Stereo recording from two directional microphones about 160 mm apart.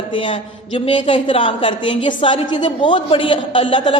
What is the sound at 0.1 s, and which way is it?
A woman's voice, 30° left (ahead or behind).